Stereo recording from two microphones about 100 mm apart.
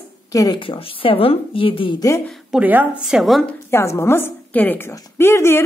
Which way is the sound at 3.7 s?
25° left (ahead or behind).